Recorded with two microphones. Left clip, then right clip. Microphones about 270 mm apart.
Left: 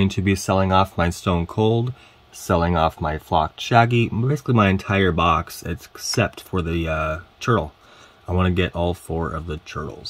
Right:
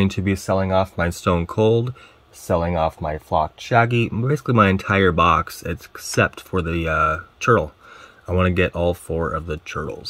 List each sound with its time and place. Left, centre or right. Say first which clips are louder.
0.0 s speech: left 1 dB; centre
0.6 s speech: left 3 dB; left
1.1 s speech: right 3 dB; centre
3.0 s speech: even; left
3.9 s speech: right 1 dB; centre